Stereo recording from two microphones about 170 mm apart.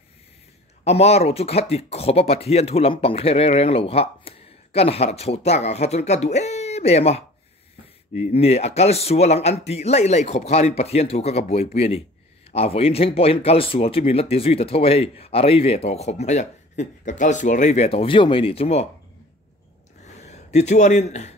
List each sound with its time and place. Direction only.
0.8 s speech: 40° left (ahead or behind)
20.2 s speech: 40° left (ahead or behind)